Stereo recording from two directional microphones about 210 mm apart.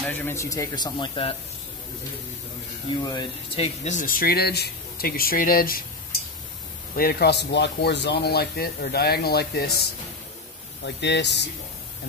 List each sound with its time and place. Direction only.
0.0 s a man's voice: 10° left (ahead or behind)
3.0 s speech: 20° left (ahead or behind); by 5.8 s 45° left (ahead or behind)
7.0 s speech: 50° left (ahead or behind)
11.0 s speech: 55° left (ahead or behind)